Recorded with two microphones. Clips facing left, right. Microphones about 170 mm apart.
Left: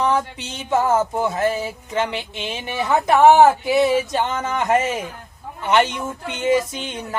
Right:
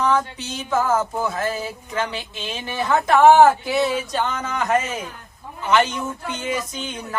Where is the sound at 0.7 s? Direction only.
25° left (ahead or behind).